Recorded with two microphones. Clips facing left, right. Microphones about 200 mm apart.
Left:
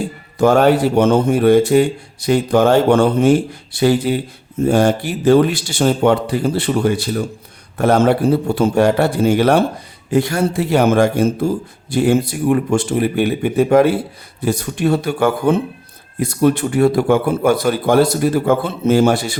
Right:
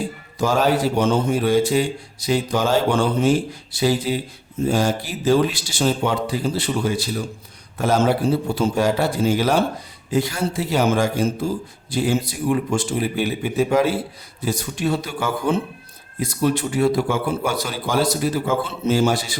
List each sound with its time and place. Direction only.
0.3 s a man's voice: 60° left (ahead or behind)